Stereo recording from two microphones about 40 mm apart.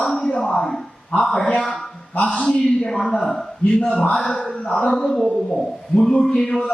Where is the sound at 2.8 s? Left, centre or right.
Centre.